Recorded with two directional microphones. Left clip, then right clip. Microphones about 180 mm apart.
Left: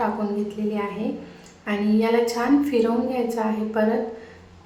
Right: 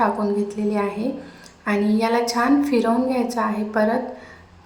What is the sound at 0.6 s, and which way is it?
A woman's voice, 20° right (ahead or behind).